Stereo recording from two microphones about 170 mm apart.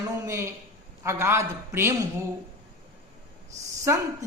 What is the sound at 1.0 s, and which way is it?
Speech, 15° right (ahead or behind).